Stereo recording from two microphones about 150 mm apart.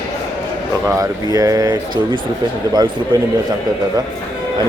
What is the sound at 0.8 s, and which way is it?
Speech, 20° right (ahead or behind).